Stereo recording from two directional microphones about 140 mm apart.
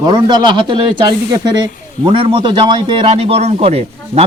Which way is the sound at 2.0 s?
35° right (ahead or behind).